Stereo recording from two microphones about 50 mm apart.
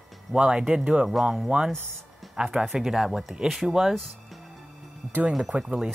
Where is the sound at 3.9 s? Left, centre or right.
Centre.